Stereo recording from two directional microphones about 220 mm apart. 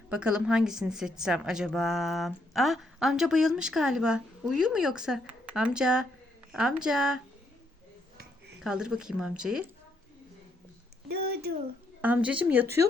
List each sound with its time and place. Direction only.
0.1 s a woman's voice: 5° right (ahead or behind)
8.6 s a woman's voice: centre (ahead or behind)
11.1 s speech: 45° right (ahead or behind)
12.0 s speech: 5° right (ahead or behind)